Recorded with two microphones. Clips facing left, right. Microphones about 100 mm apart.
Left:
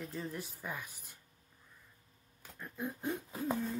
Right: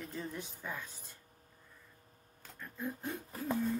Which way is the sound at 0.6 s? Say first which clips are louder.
Even; 10° left (ahead or behind).